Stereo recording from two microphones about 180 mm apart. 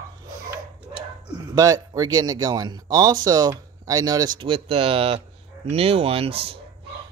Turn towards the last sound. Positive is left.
turn(degrees=-30)  # may be behind; listen again after turning